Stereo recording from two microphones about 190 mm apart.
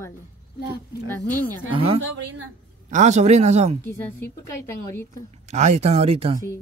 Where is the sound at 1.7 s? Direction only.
30° right (ahead or behind).